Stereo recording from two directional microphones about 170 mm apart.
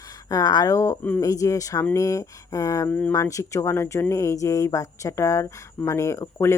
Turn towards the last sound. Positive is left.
turn(degrees=15)  # may be behind; listen again after turning